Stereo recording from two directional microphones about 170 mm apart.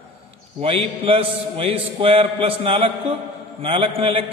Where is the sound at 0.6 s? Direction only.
35° right (ahead or behind).